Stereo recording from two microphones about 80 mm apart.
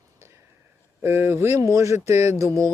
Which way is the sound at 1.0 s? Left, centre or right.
Right.